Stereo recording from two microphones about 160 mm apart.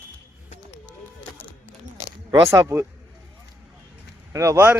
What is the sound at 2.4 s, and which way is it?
Speech, 20° right (ahead or behind).